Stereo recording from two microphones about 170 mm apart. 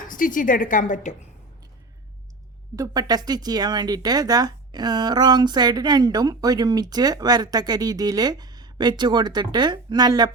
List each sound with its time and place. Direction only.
0.0 s a woman's voice: 50° left (ahead or behind)
2.7 s speech: 20° right (ahead or behind)